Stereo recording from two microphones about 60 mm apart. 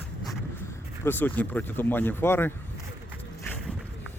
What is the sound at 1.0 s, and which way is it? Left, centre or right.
Speech, left.